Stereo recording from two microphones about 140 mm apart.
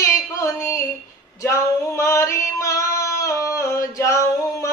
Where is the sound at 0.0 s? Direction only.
20° left (ahead or behind).